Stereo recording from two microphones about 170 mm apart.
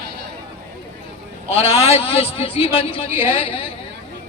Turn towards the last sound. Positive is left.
turn(degrees=30)  # may be behind; listen again after turning